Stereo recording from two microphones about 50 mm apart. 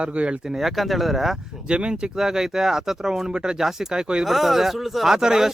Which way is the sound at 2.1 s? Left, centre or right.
Centre.